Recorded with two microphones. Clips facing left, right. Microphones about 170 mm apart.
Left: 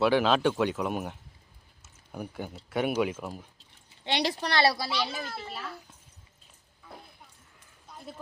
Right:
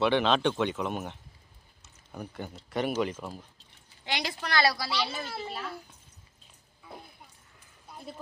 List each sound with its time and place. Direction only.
0.0 s a man's voice: 5° left (ahead or behind)
3.8 s a woman's voice: 30° left (ahead or behind)
5.2 s a child's voice: 10° right (ahead or behind)
7.9 s a sound: 5° right (ahead or behind)